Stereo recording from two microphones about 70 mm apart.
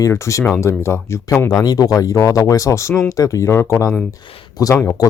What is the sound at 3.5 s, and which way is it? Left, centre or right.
Speech, left.